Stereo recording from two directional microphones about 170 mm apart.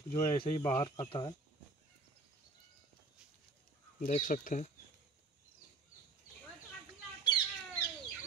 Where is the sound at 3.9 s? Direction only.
45° left (ahead or behind).